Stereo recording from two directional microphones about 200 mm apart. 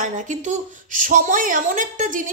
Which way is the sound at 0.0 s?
40° right (ahead or behind).